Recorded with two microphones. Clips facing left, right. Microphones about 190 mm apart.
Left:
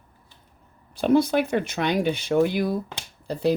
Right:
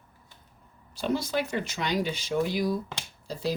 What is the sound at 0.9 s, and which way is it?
Speech, 55° left (ahead or behind).